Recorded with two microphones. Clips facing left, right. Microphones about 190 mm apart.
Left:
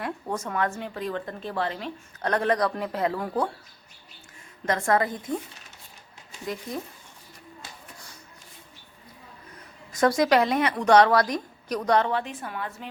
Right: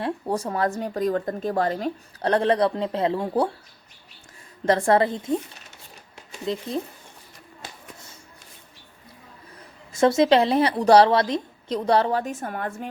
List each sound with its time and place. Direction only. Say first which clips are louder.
0.0 s speech: right 5 dB; 35° right (ahead or behind)
4.6 s a woman's voice: right 5 dB; 30° right (ahead or behind)
6.4 s a woman's voice: right 5 dB; 25° right (ahead or behind)
9.9 s speech: right 3 dB; 25° right (ahead or behind); by 12.9 s 50° right (ahead or behind)